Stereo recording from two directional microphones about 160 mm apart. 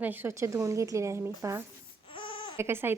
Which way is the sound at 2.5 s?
15° right (ahead or behind).